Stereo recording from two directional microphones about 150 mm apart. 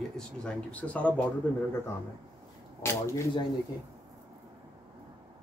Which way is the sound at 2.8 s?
20° left (ahead or behind).